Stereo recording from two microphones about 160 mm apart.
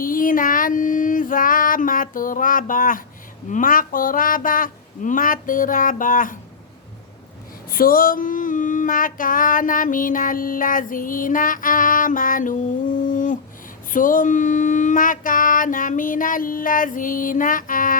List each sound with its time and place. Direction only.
0.0 s child singing: 60° left (ahead or behind)
3.5 s female singing: 60° left (ahead or behind)
7.7 s female singing: 60° left (ahead or behind)